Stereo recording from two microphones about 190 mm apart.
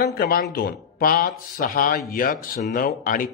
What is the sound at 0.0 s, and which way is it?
Speech, 55° left (ahead or behind).